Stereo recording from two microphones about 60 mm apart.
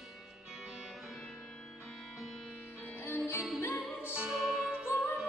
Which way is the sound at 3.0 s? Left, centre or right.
Left.